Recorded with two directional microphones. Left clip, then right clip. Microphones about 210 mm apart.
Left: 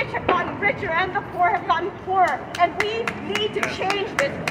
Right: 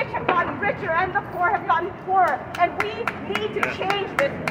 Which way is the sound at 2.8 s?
20° right (ahead or behind).